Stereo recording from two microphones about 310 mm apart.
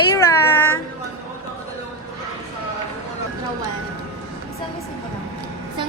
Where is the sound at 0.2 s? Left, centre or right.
Centre.